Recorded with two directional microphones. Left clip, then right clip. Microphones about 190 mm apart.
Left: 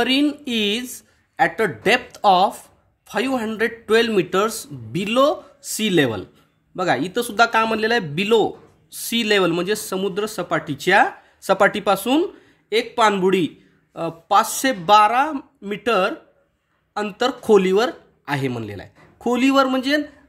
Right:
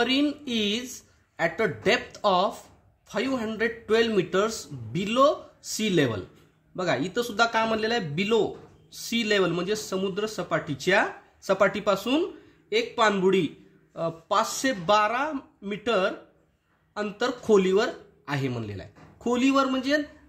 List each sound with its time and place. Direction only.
0.0 s speech: 40° left (ahead or behind)